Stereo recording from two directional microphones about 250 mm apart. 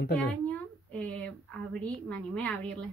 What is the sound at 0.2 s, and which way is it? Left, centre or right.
A woman's voice, centre.